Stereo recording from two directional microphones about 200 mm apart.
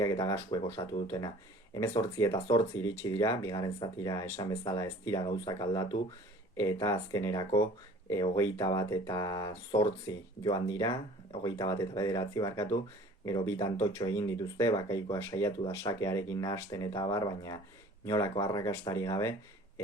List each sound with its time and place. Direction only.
0.0 s speech: 15° left (ahead or behind)